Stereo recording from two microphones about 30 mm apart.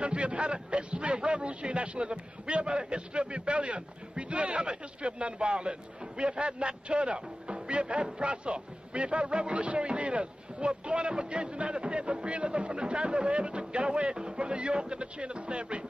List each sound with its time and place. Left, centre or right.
0.0 s a man's voice: right